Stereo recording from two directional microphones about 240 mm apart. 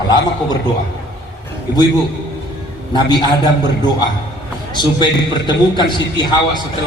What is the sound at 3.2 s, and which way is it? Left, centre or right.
Speech, centre.